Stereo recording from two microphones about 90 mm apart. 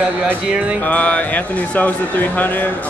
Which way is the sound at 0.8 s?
15° left (ahead or behind).